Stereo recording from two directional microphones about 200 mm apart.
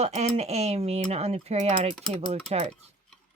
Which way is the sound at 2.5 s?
30° right (ahead or behind).